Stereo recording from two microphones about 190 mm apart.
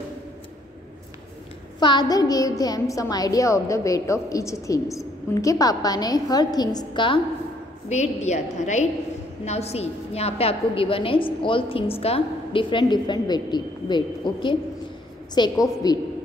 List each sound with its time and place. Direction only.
1.8 s a woman's voice: 25° left (ahead or behind)
7.9 s a woman's voice: 35° left (ahead or behind); by 16.0 s 20° left (ahead or behind)